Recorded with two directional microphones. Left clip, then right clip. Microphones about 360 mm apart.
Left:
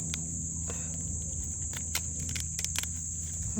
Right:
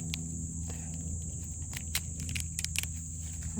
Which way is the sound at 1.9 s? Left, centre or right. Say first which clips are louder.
Even; centre.